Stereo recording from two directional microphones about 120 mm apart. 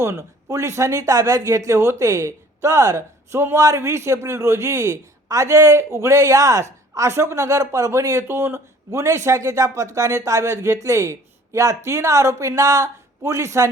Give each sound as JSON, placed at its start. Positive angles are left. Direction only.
{"t": 0.0, "sound": "speech", "side_deg": -25}